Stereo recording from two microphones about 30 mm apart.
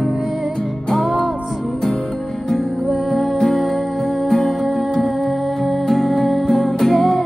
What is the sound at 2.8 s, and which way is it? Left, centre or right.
Music, centre.